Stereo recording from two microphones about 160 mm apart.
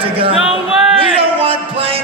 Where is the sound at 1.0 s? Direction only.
35° right (ahead or behind).